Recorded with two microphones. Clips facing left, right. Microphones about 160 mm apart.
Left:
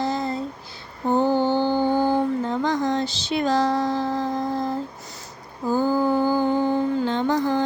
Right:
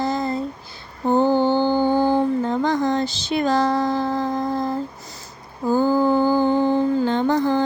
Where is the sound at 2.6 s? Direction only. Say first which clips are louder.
Right 2 dB; 50° right (ahead or behind).